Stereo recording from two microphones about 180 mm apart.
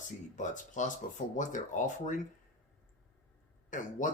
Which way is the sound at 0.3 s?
45° left (ahead or behind).